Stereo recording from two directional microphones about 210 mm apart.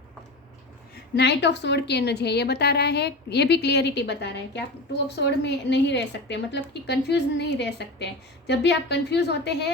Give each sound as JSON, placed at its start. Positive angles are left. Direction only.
{"t": 1.1, "sound": "a woman's voice", "side_deg": 55}